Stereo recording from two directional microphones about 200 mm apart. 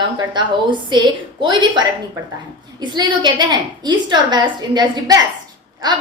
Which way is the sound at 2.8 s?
20° right (ahead or behind).